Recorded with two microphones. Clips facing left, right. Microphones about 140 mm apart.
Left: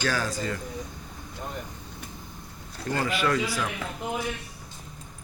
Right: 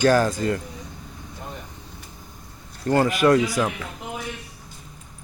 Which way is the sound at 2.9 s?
45° right (ahead or behind).